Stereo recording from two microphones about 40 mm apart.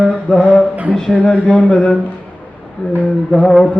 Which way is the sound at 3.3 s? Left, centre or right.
Centre.